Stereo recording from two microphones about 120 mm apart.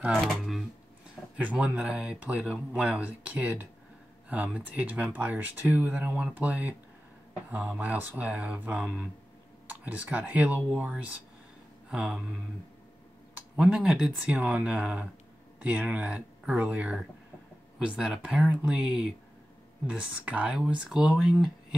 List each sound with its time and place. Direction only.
0.0 s speech: centre (ahead or behind)
13.6 s speech: 5° right (ahead or behind)